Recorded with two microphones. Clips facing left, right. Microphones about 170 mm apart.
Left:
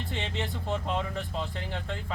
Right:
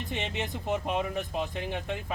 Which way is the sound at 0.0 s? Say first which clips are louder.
Right 1 dB; 15° right (ahead or behind).